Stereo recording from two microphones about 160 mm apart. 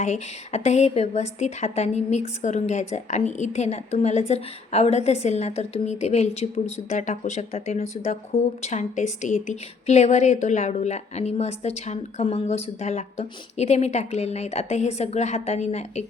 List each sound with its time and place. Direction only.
0.0 s a woman's voice: 45° left (ahead or behind)